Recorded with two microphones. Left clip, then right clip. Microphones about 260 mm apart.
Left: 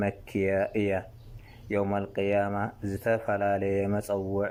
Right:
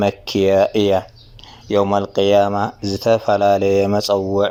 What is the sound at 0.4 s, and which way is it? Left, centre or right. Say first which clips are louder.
Speech: right 13 dB; centre.